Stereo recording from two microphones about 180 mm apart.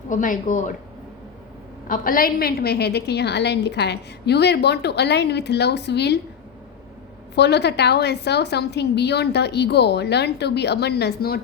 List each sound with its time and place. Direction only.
0.1 s a woman's voice: 45° left (ahead or behind)
1.9 s a woman's voice: 50° left (ahead or behind); by 6.1 s 70° left (ahead or behind)
7.3 s a woman's voice: 70° left (ahead or behind)